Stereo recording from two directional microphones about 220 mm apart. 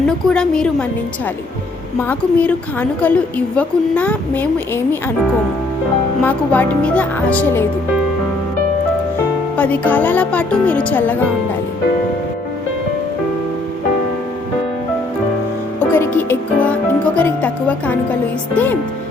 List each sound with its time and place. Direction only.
0.1 s a woman's voice: 5° left (ahead or behind)
2.0 s a woman's voice: 10° left (ahead or behind)
6.2 s a woman's voice: 10° left (ahead or behind)
9.6 s a woman's voice: 10° left (ahead or behind)
15.8 s music: 10° left (ahead or behind)
17.2 s a woman's voice: 5° left (ahead or behind)